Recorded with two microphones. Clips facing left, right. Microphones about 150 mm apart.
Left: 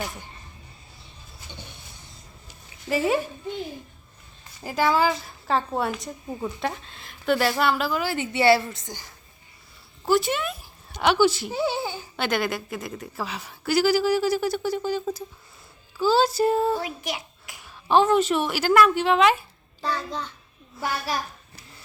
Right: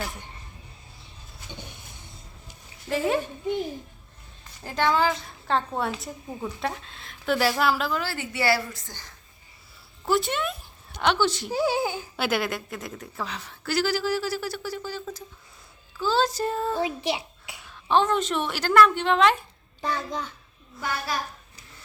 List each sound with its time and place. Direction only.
2.9 s a woman's voice: 5° left (ahead or behind)
4.6 s speech: 5° left (ahead or behind)
8.0 s a woman's voice: 20° left (ahead or behind)
10.1 s a woman's voice: centre (ahead or behind)
17.0 s a child's voice: 30° right (ahead or behind)
17.7 s a woman's voice: 10° left (ahead or behind)
19.8 s a child's voice: 15° right (ahead or behind)